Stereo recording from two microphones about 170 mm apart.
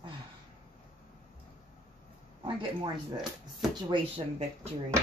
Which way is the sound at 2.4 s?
30° right (ahead or behind).